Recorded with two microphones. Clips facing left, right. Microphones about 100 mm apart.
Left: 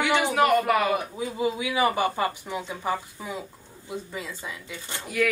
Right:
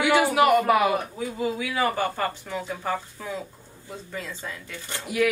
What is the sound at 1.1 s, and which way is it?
Speech, 15° left (ahead or behind).